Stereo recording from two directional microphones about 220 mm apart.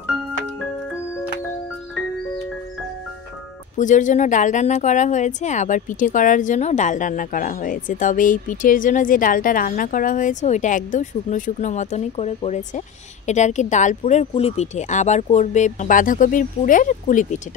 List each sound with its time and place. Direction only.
3.7 s speech: 35° left (ahead or behind)